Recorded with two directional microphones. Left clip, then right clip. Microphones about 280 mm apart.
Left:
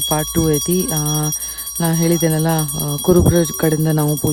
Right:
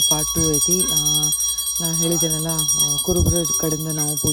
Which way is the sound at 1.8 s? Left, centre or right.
Centre.